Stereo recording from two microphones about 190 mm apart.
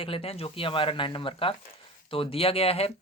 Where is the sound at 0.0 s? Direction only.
30° left (ahead or behind).